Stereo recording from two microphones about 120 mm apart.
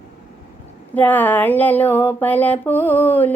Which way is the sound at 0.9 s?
15° left (ahead or behind).